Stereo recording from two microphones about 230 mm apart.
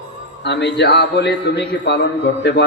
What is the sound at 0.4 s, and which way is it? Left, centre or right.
A man's voice, left.